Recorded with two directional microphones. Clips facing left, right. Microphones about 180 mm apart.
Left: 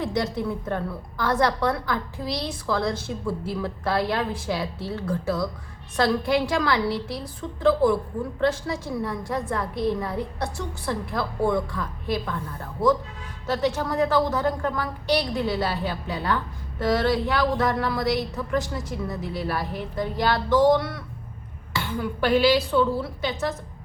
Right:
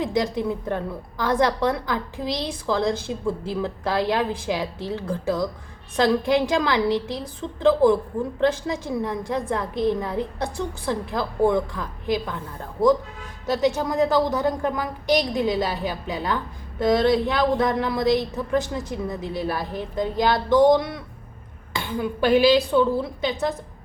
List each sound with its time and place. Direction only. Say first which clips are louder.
0.0 s a woman's voice: right 3 dB; 20° right (ahead or behind)
13.5 s a woman's voice: right 3 dB; 15° right (ahead or behind)